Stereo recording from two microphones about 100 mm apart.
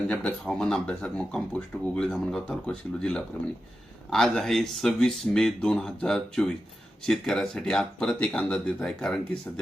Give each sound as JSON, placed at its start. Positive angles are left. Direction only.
{"t": 0.1, "sound": "speech", "side_deg": 15}